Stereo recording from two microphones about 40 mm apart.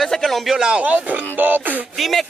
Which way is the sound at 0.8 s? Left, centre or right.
Right.